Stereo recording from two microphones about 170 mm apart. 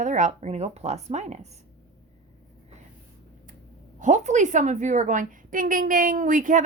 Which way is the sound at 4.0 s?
45° right (ahead or behind).